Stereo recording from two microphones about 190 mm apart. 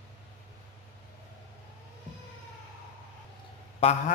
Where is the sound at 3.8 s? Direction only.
35° left (ahead or behind).